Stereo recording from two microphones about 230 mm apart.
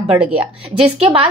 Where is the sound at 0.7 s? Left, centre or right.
Right.